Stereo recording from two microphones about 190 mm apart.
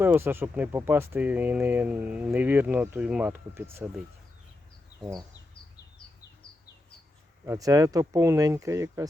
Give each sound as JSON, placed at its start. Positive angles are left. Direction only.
{"t": 0.0, "sound": "speech", "side_deg": -10}
{"t": 7.4, "sound": "speech", "side_deg": -15}